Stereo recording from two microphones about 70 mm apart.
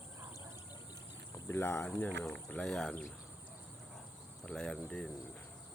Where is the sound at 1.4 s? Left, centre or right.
Left.